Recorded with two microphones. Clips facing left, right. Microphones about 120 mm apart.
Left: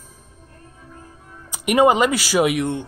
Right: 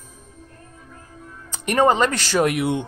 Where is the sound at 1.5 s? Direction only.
10° left (ahead or behind).